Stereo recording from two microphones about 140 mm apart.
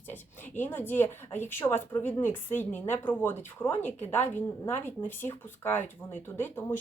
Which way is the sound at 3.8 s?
55° left (ahead or behind).